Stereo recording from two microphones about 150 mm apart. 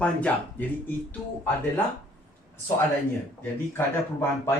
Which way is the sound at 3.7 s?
15° left (ahead or behind).